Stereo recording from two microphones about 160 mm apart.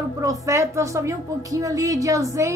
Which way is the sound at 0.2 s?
20° right (ahead or behind).